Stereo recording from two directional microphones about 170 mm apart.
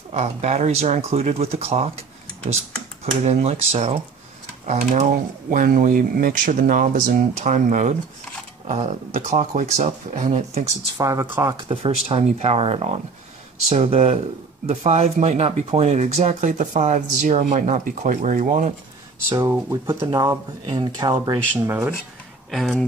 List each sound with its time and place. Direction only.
0.1 s speech: 40° right (ahead or behind)
3.3 s speech: 40° right (ahead or behind)
4.6 s speech: 45° right (ahead or behind)
11.0 s speech: 20° right (ahead or behind)
11.5 s speech: 35° right (ahead or behind)
19.2 s speech: 15° right (ahead or behind)
21.6 s speech: 10° right (ahead or behind)
22.5 s speech: centre (ahead or behind)